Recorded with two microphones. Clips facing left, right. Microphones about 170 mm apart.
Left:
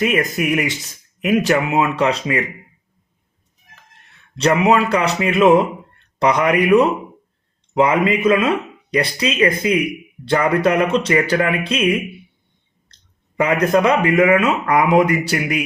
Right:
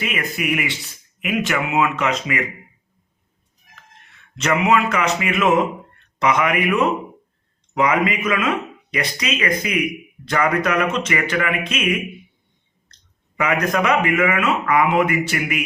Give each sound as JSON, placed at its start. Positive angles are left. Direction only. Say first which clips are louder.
{"t": 0.0, "sound": "speech", "louder": "left 7 dB", "side_deg": 40}
{"t": 4.4, "sound": "speech", "louder": "left 3 dB", "side_deg": 35}